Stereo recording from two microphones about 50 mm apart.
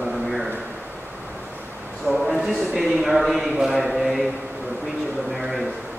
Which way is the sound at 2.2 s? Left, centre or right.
Centre.